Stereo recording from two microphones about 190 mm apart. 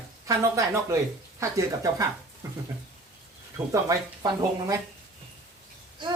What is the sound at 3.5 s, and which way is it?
Speech, 15° right (ahead or behind).